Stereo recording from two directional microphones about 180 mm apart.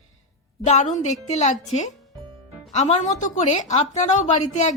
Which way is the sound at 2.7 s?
35° left (ahead or behind).